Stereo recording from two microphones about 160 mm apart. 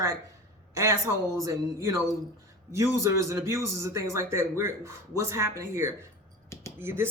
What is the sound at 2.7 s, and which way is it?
A man's voice, 20° right (ahead or behind).